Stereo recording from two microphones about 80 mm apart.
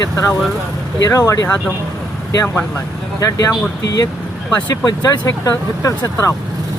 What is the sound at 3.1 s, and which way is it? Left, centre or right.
Speech, left.